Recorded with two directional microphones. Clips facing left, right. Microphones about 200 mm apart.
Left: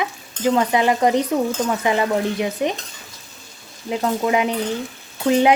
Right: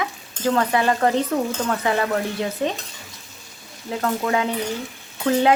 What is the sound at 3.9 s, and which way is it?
Speech, 15° left (ahead or behind).